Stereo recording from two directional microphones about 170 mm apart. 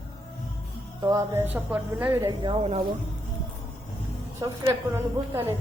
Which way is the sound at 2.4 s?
30° right (ahead or behind).